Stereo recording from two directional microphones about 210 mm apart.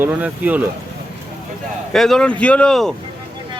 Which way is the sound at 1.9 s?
Centre (ahead or behind).